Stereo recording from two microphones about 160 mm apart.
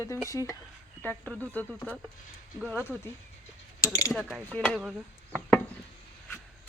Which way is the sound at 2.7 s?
15° left (ahead or behind).